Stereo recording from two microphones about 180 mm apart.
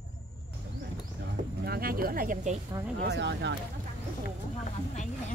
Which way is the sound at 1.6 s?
55° right (ahead or behind).